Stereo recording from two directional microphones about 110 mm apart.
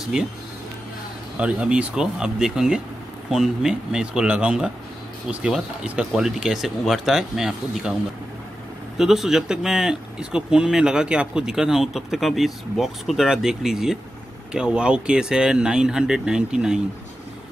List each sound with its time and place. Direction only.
0.1 s speech: 5° right (ahead or behind)
1.4 s speech: 10° right (ahead or behind)
8.9 s speech: 5° right (ahead or behind)